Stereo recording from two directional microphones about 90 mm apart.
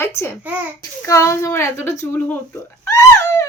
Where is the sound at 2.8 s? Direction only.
35° left (ahead or behind).